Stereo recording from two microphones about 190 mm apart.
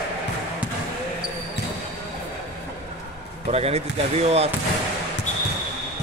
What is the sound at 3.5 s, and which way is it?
Speech, 35° right (ahead or behind).